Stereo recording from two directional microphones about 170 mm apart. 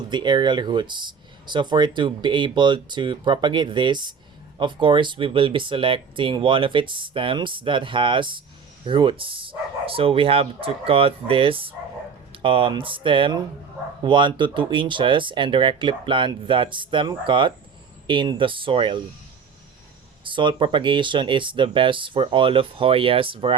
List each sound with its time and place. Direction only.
0.1 s speech: 25° right (ahead or behind)
20.2 s speech: 30° right (ahead or behind)